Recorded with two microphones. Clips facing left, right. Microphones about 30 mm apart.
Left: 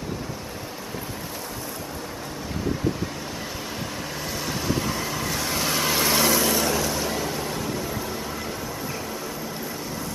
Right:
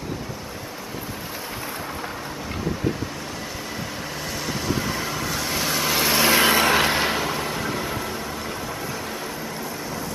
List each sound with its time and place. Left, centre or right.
4.5 s vehicle: centre
6.2 s vehicle: right
6.6 s vehicle: right
6.9 s a sound: right